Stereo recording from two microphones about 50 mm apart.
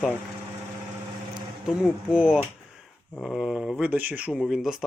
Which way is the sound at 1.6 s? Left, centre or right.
Centre.